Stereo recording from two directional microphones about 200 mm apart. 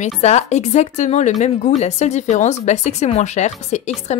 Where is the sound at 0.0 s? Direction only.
35° left (ahead or behind).